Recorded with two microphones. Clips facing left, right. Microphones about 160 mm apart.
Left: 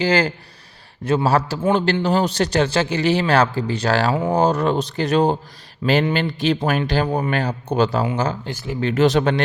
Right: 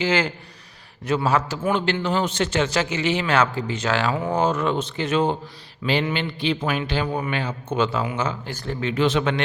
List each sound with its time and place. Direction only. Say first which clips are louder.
0.0 s a man's voice: left 4 dB; 35° left (ahead or behind)
8.4 s speech: left 2 dB; 10° left (ahead or behind)
8.8 s a man's voice: left 5 dB; 40° left (ahead or behind)